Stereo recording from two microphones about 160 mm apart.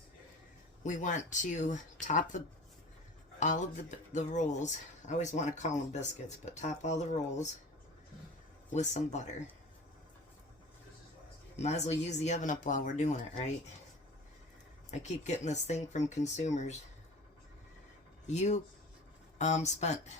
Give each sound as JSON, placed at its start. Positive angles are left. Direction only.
{"t": 0.9, "sound": "speech", "side_deg": 50}
{"t": 3.4, "sound": "speech", "side_deg": 50}
{"t": 8.7, "sound": "speech", "side_deg": 50}
{"t": 11.5, "sound": "speech", "side_deg": 45}
{"t": 14.8, "sound": "speech", "side_deg": 45}
{"t": 18.3, "sound": "speech", "side_deg": 45}